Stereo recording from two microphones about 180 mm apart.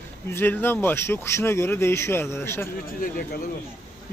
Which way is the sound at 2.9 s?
55° left (ahead or behind).